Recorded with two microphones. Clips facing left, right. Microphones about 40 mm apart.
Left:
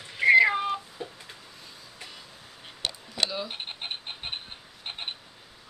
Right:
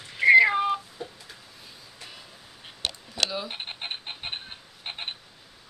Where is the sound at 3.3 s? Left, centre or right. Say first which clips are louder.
Right 1 dB; centre.